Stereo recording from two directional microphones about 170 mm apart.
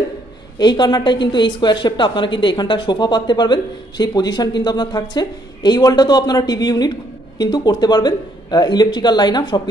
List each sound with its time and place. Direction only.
0.6 s a woman's voice: 25° left (ahead or behind)